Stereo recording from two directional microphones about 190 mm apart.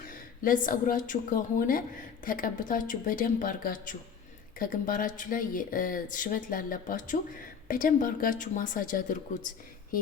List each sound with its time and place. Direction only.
0.1 s speech: 45° left (ahead or behind)